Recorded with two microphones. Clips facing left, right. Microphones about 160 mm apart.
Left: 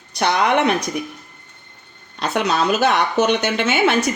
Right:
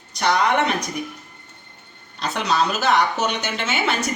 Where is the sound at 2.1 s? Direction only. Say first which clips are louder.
Left 2 dB; 60° left (ahead or behind).